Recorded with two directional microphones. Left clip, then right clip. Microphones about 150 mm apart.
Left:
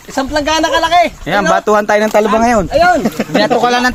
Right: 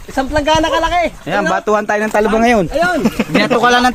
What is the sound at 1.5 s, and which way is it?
Speech, 25° left (ahead or behind).